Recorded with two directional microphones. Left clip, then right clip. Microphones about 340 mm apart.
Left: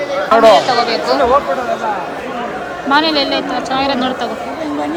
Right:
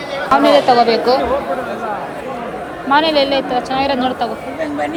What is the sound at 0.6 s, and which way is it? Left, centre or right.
Speech, centre.